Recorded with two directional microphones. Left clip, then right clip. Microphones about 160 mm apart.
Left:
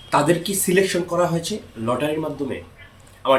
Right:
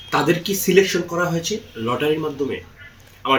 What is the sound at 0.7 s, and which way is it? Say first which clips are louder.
Speech: right 2 dB; 20° left (ahead or behind).